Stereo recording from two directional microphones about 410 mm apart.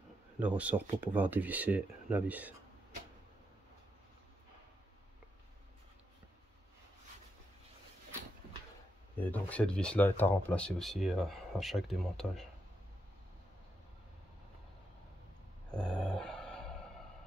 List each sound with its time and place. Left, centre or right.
0.4 s speech: centre
9.2 s speech: centre
15.7 s dog: centre